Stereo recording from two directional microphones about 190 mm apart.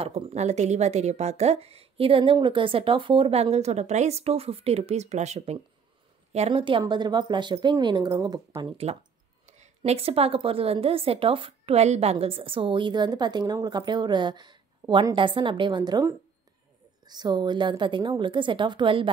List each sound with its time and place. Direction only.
0.0 s a woman's voice: 35° right (ahead or behind)